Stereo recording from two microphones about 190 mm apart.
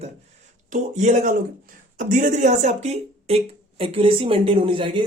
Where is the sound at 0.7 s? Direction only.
40° right (ahead or behind).